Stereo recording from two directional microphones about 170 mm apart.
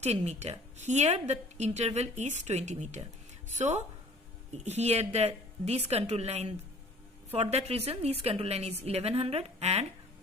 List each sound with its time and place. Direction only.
0.0 s a woman's voice: 40° right (ahead or behind)